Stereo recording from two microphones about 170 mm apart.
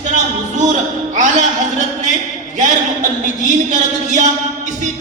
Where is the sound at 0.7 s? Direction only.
45° right (ahead or behind).